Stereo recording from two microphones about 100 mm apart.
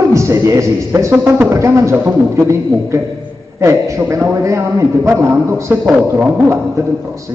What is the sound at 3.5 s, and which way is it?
A man's voice, 30° right (ahead or behind).